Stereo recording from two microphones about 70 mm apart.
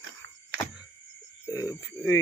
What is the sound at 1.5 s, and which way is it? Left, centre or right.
Speech, left.